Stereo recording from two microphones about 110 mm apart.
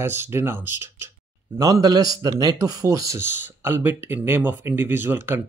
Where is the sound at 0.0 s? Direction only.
20° right (ahead or behind).